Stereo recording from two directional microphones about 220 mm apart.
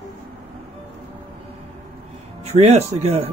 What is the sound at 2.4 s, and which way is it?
Speech, 30° right (ahead or behind).